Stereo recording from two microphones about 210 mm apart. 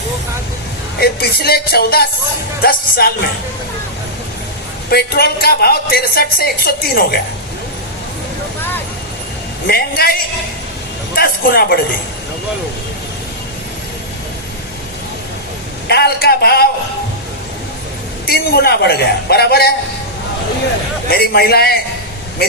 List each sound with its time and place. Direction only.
0.9 s a woman's voice: 50° left (ahead or behind)
4.9 s a woman's voice: 50° left (ahead or behind)
9.6 s a woman's voice: 45° left (ahead or behind)
15.9 s a woman's voice: 50° left (ahead or behind)
18.3 s a woman's voice: 50° left (ahead or behind)
21.1 s a woman's voice: 50° left (ahead or behind)